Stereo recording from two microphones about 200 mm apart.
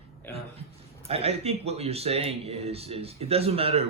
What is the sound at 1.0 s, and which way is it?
Speech, 30° right (ahead or behind).